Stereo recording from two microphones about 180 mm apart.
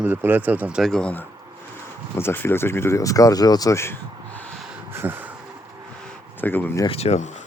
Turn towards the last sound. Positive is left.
turn(degrees=35)  # may be behind; listen again after turning